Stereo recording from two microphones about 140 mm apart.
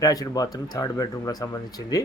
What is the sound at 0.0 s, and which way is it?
Speech, 25° left (ahead or behind).